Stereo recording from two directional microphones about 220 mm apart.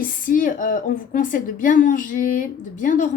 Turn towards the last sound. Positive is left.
turn(degrees=35)  # may be behind; listen again after turning